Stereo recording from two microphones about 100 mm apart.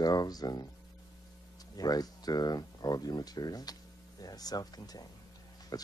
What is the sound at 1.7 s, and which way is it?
Speech, 40° left (ahead or behind).